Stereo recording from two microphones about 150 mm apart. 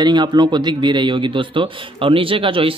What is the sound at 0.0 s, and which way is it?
A man's voice, 30° right (ahead or behind).